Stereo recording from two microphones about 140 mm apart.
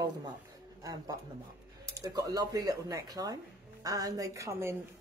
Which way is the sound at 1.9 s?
25° right (ahead or behind).